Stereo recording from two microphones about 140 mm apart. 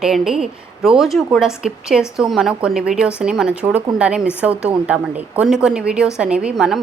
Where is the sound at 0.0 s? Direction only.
5° right (ahead or behind).